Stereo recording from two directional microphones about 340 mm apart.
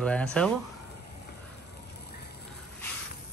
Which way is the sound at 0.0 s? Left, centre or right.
Centre.